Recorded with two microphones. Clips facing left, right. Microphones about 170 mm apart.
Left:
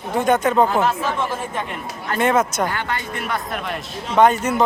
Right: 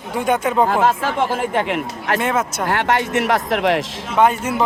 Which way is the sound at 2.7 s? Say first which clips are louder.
Right 7 dB; 75° right (ahead or behind).